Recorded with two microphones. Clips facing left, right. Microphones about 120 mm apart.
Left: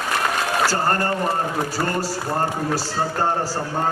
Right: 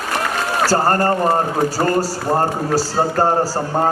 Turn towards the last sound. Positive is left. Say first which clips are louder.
# right 5 dB
turn(degrees=-40)  # may be behind; listen again after turning